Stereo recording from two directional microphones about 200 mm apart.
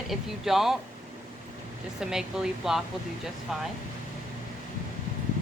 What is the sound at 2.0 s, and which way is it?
Speech, 5° right (ahead or behind).